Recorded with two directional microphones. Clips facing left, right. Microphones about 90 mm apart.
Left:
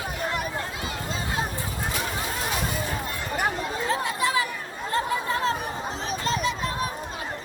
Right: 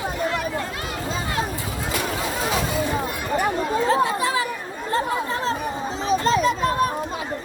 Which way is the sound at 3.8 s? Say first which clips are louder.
Right 4 dB; 30° right (ahead or behind).